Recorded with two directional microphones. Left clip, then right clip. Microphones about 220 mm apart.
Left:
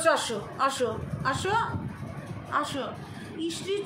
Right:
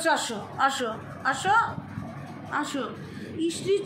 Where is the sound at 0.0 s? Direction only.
Centre (ahead or behind).